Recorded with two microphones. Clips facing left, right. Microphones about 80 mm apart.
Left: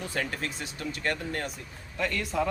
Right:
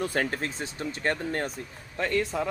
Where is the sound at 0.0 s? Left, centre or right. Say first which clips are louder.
Right 4 dB; right.